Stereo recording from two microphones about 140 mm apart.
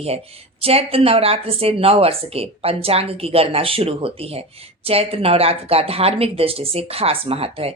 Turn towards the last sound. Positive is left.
turn(degrees=-45)  # may be behind; listen again after turning